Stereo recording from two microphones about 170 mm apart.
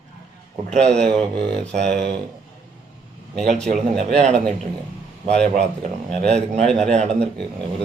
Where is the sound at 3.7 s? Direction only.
50° right (ahead or behind).